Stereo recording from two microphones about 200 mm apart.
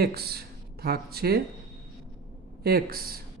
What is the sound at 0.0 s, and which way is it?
Speech, 50° right (ahead or behind).